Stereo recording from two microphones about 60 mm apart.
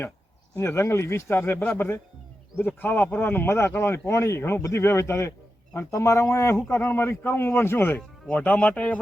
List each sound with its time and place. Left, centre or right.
0.5 s a man's voice: left